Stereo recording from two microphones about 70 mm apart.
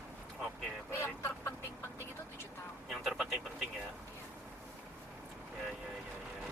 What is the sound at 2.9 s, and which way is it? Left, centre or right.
Speech, centre.